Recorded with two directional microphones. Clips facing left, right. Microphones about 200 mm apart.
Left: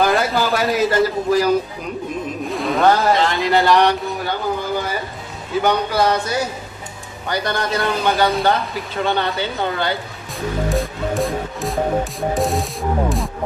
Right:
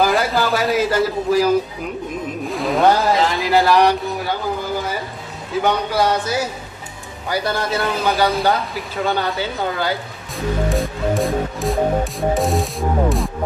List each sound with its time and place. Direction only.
0.0 s a man's voice: centre (ahead or behind)
2.5 s music: centre (ahead or behind)
3.0 s speech: centre (ahead or behind)
10.7 s music: centre (ahead or behind)